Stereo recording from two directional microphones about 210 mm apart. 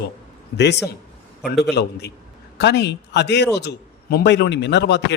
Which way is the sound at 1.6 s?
50° left (ahead or behind).